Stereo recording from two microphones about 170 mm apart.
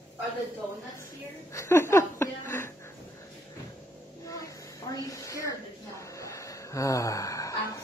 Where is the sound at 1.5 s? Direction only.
15° left (ahead or behind).